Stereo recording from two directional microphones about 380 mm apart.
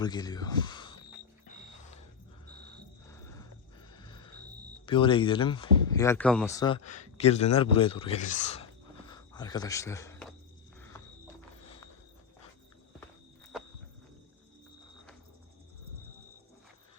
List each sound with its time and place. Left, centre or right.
0.0 s speech: centre
1.5 s mechanisms: centre
2.6 s a sound: centre
3.9 s music: centre
4.9 s speech: centre
9.0 s a sound: centre